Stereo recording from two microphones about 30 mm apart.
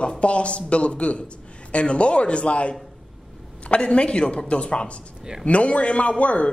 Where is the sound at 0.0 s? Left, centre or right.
Left.